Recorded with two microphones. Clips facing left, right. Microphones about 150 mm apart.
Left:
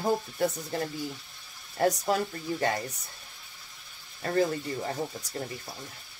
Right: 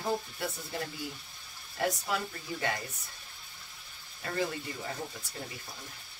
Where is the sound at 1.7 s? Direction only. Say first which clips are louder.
Left 6 dB; 40° left (ahead or behind).